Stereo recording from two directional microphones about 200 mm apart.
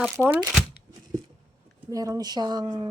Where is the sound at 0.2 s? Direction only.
Centre (ahead or behind).